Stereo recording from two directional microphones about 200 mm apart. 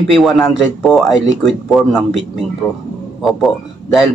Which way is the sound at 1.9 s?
10° left (ahead or behind).